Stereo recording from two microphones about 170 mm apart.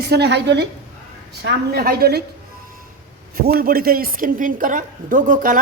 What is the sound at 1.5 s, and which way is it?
Speech, 65° right (ahead or behind).